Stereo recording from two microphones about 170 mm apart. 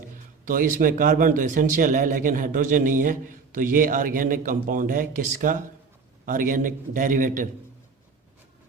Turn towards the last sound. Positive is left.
turn(degrees=-50)  # may be behind; listen again after turning